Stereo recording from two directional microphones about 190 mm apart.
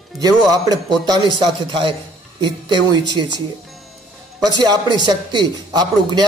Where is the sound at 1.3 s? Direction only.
25° right (ahead or behind).